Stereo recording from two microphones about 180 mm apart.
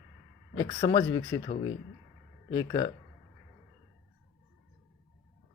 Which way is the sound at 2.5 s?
25° left (ahead or behind).